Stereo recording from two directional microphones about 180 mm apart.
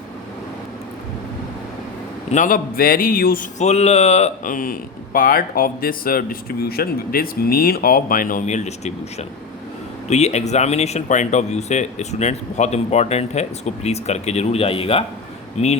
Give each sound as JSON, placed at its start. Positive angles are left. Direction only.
{"t": 2.3, "sound": "speech", "side_deg": 45}
{"t": 3.6, "sound": "speech", "side_deg": 40}